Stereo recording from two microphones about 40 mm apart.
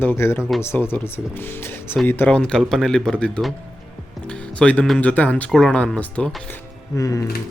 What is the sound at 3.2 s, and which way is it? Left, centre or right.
Speech, left.